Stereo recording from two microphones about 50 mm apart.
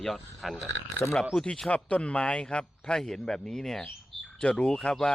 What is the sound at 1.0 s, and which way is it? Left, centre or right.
Speech, left.